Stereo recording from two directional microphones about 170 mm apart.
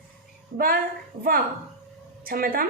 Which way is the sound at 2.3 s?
60° right (ahead or behind).